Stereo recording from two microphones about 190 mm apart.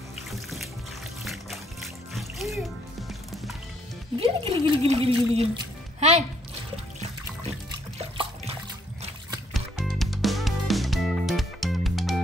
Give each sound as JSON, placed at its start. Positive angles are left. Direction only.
{"t": 0.3, "sound": "water", "side_deg": 0}
{"t": 1.2, "sound": "music", "side_deg": 0}
{"t": 4.2, "sound": "speech", "side_deg": -30}
{"t": 8.0, "sound": "water", "side_deg": -30}
{"t": 9.5, "sound": "music", "side_deg": 0}